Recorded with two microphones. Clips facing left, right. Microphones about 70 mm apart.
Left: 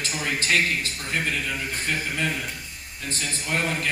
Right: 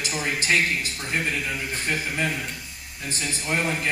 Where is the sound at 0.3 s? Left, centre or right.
Right.